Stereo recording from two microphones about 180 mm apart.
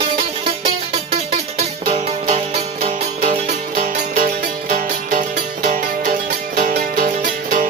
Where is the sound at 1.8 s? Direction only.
35° right (ahead or behind).